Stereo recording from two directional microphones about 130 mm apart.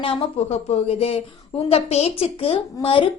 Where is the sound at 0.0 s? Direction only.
50° left (ahead or behind).